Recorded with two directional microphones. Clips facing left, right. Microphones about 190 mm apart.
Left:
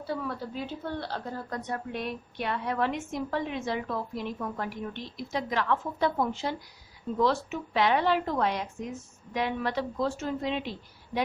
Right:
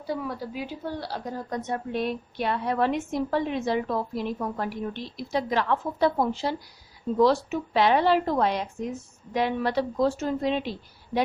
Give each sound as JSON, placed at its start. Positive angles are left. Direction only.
{"t": 0.1, "sound": "a woman's voice", "side_deg": -10}